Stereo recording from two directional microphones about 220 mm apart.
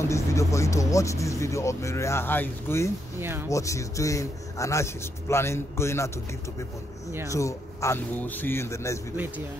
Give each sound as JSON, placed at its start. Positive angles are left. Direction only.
{"t": 0.0, "sound": "speech", "side_deg": 15}
{"t": 3.2, "sound": "speech", "side_deg": -10}
{"t": 3.4, "sound": "speech", "side_deg": 15}
{"t": 7.2, "sound": "speech", "side_deg": 15}